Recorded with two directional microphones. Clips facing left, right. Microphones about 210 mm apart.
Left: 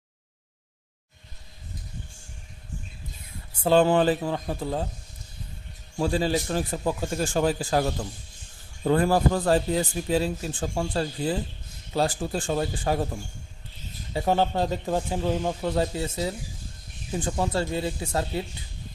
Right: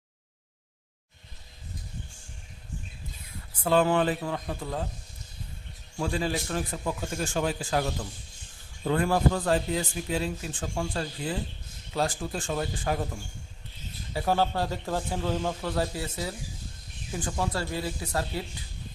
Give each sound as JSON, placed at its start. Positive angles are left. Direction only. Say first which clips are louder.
{"t": 3.6, "sound": "speech", "louder": "left 4 dB", "side_deg": 30}
{"t": 6.0, "sound": "speech", "louder": "left 5 dB", "side_deg": 30}
{"t": 14.1, "sound": "a man's voice", "louder": "left 3 dB", "side_deg": 20}